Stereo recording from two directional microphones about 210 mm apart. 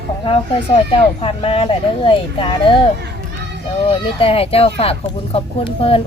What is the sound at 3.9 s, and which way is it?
A child's voice, 25° left (ahead or behind).